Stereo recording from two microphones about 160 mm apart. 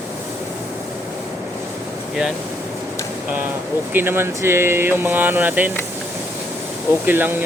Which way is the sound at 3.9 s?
15° right (ahead or behind).